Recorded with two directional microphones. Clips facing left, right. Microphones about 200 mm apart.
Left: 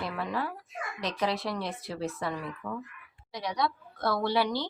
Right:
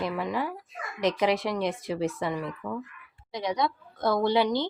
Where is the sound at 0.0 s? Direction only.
15° right (ahead or behind).